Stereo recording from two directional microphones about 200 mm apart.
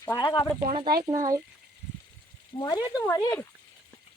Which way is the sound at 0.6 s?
25° right (ahead or behind).